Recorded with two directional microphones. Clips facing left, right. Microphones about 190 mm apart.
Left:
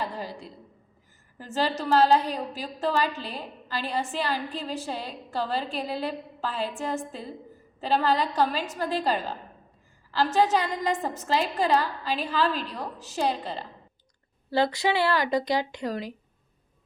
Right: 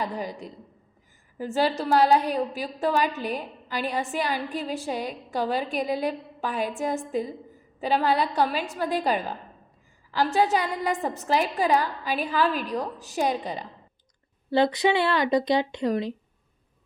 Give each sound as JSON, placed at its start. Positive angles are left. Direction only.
{"t": 0.0, "sound": "a woman's voice", "side_deg": -15}